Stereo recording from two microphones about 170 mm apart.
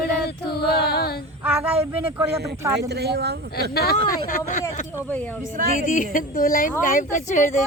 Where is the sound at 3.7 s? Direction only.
65° left (ahead or behind).